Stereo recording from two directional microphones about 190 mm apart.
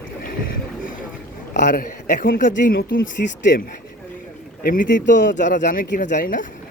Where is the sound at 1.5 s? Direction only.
45° left (ahead or behind).